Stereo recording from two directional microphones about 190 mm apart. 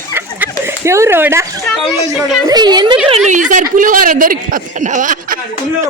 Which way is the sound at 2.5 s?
20° right (ahead or behind).